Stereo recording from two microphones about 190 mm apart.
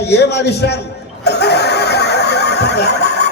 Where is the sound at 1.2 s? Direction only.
60° left (ahead or behind).